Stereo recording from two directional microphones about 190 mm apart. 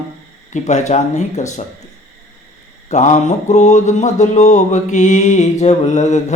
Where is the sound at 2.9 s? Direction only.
35° left (ahead or behind).